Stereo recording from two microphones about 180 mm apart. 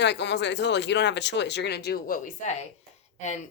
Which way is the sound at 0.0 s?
75° left (ahead or behind).